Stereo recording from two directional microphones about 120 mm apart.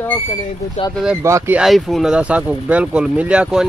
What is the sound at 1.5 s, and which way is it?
Speech, centre (ahead or behind).